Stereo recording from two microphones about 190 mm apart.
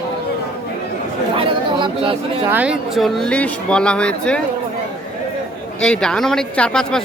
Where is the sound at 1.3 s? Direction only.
25° right (ahead or behind).